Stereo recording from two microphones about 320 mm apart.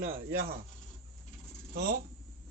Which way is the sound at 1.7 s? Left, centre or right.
Right.